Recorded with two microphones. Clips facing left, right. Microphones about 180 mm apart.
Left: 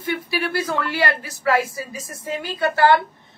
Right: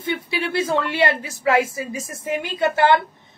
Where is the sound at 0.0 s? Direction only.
25° right (ahead or behind).